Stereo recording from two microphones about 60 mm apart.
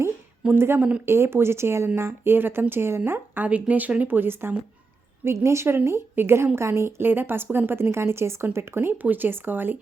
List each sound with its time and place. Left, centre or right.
0.5 s a woman's voice: right
0.8 s speech: right
1.0 s a woman's voice: right
5.2 s a woman's voice: right